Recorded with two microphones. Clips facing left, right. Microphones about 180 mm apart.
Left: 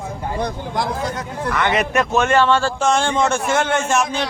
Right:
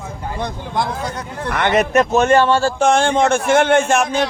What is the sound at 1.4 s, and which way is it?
A man's voice, 45° right (ahead or behind).